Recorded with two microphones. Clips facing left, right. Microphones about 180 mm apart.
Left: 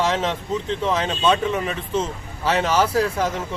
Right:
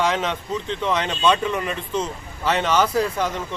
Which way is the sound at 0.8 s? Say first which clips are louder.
Even; 5° left (ahead or behind).